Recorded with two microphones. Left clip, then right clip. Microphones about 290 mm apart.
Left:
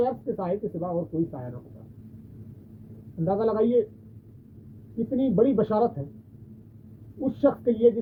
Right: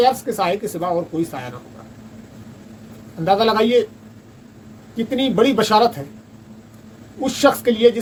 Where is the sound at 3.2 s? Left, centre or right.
Centre.